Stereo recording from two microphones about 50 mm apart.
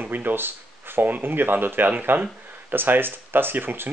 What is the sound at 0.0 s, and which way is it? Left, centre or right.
Speech, right.